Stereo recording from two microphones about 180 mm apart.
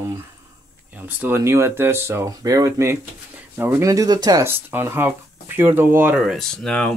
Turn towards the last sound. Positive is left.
turn(degrees=5)  # may be behind; listen again after turning